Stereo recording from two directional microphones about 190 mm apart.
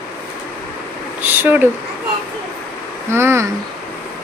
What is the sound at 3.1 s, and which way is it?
Speech, 15° right (ahead or behind).